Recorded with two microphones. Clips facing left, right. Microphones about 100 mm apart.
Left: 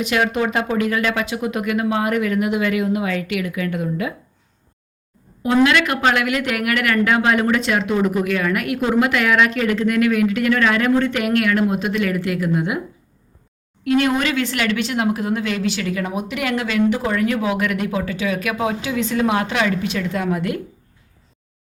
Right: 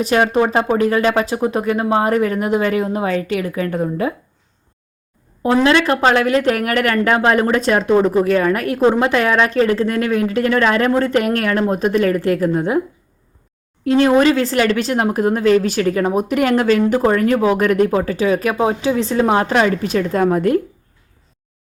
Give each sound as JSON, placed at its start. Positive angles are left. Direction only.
{"t": 0.0, "sound": "speech", "side_deg": -35}
{"t": 5.6, "sound": "speech", "side_deg": -30}
{"t": 13.8, "sound": "speech", "side_deg": -30}